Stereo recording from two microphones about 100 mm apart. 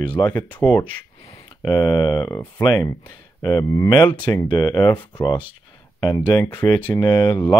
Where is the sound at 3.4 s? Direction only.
40° left (ahead or behind).